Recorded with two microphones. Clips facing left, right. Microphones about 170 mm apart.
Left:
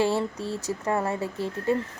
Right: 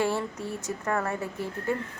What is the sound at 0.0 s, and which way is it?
Speech, 25° left (ahead or behind).